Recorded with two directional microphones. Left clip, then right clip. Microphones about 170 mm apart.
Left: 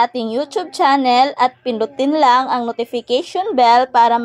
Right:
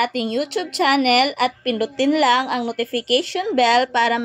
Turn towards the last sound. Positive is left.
turn(degrees=10)  # may be behind; listen again after turning